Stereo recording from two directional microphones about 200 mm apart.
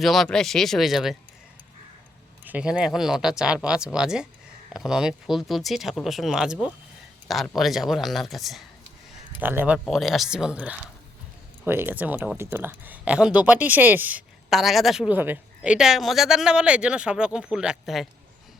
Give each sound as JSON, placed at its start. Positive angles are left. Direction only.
{"t": 0.0, "sound": "speech", "side_deg": 0}
{"t": 2.4, "sound": "speech", "side_deg": -5}